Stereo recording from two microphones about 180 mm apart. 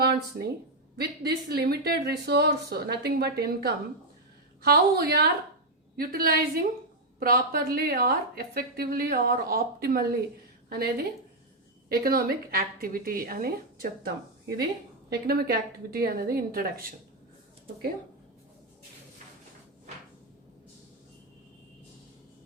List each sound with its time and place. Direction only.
0.0 s a woman's voice: 60° right (ahead or behind)
14.0 s a woman's voice: 65° right (ahead or behind)